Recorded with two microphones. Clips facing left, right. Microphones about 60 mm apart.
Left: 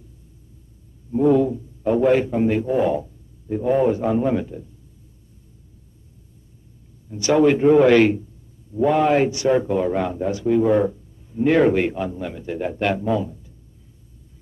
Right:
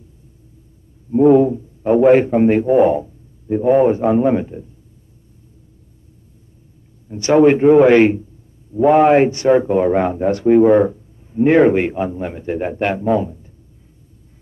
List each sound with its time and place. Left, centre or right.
1.1 s a man's voice: right
2.7 s a man's voice: right
7.1 s a man's voice: right
9.5 s a man's voice: right
10.7 s speech: right